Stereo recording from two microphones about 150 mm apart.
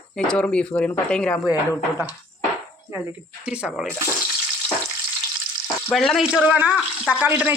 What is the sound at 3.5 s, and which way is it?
Speech, 5° right (ahead or behind).